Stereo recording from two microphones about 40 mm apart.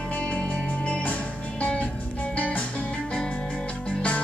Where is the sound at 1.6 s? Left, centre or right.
Left.